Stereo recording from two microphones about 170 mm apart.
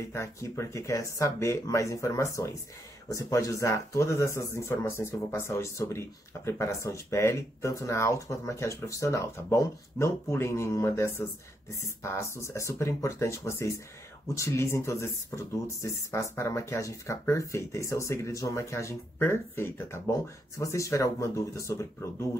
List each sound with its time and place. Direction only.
0.1 s speech: 15° left (ahead or behind)